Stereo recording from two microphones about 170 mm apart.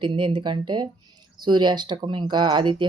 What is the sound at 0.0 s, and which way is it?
Speech, 30° right (ahead or behind).